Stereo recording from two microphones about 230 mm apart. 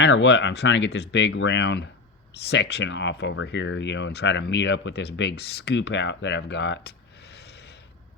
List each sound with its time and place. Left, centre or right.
0.0 s speech: left